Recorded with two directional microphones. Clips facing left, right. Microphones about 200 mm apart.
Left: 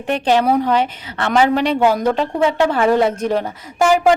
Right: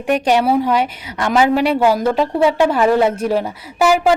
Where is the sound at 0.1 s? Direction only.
10° right (ahead or behind).